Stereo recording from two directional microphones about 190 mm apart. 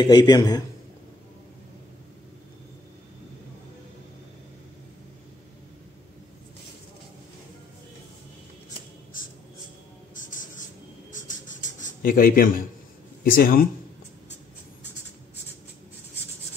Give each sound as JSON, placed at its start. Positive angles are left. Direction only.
{"t": 0.0, "sound": "a man's voice", "side_deg": 20}
{"t": 10.1, "sound": "writing", "side_deg": 45}
{"t": 12.0, "sound": "a man's voice", "side_deg": 50}